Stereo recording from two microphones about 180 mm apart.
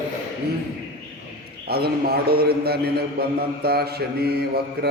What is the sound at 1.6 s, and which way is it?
A man's voice, 60° right (ahead or behind).